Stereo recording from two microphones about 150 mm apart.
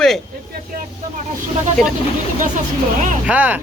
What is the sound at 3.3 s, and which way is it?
Speech, 10° right (ahead or behind).